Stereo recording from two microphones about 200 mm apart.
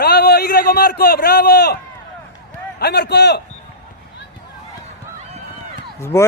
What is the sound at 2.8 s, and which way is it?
Speech, 55° left (ahead or behind).